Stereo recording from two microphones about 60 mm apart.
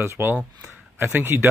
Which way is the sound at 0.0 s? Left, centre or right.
Right.